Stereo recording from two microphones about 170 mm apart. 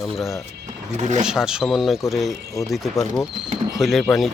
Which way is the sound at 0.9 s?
45° right (ahead or behind).